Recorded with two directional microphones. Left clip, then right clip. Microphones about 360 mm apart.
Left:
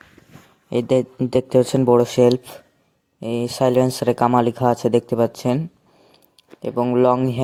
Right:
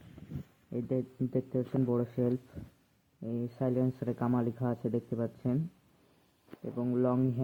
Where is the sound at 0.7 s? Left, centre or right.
Left.